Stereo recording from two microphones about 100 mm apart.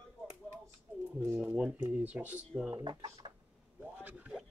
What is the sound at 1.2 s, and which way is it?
Speech, 20° right (ahead or behind).